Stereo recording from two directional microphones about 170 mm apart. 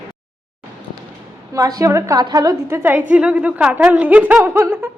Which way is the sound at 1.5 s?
20° right (ahead or behind).